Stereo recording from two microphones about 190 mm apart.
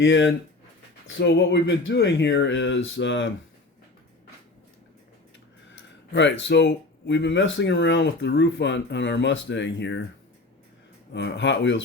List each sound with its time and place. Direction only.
0.0 s speech: 70° left (ahead or behind)
6.1 s speech: 70° left (ahead or behind)
11.1 s speech: 70° left (ahead or behind)